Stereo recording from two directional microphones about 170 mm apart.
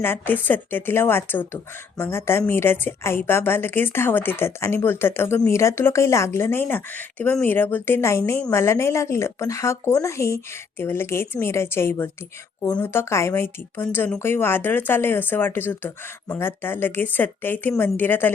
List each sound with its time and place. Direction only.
0.0 s a woman's voice: 10° left (ahead or behind)